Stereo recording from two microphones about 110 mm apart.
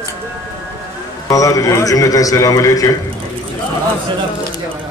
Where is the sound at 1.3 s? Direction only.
30° left (ahead or behind).